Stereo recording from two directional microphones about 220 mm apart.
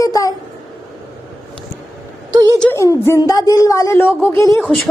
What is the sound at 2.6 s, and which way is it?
Speech, 10° left (ahead or behind).